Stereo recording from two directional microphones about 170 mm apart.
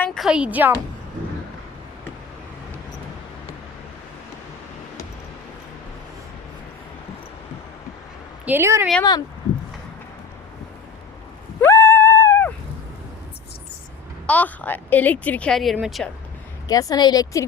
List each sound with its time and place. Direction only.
0.0 s a woman's voice: centre (ahead or behind)
8.4 s a woman's voice: 15° right (ahead or behind)
11.6 s a sound: 15° left (ahead or behind)
14.3 s speech: 10° left (ahead or behind)
16.6 s a woman's voice: 20° left (ahead or behind)